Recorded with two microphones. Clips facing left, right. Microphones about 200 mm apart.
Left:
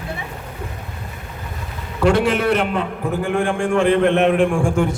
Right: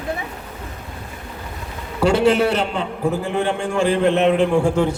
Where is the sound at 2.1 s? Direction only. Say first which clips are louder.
Right 1 dB; 25° right (ahead or behind).